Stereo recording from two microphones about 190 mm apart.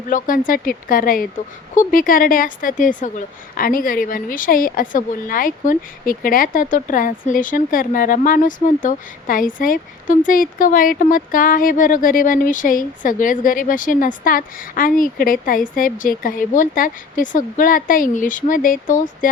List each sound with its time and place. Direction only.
0.1 s speech: 45° left (ahead or behind)